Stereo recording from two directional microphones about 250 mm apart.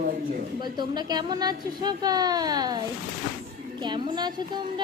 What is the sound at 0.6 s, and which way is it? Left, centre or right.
A woman's voice, centre.